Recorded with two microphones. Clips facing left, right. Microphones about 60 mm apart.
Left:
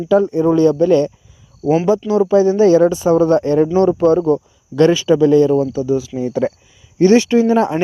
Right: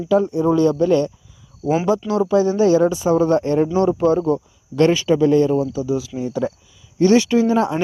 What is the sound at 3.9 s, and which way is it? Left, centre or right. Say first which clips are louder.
Speech: left 4 dB; left.